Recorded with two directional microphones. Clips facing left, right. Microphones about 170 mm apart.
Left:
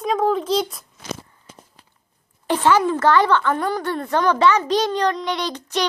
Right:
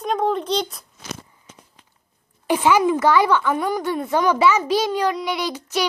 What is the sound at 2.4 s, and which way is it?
A woman's voice, 10° right (ahead or behind).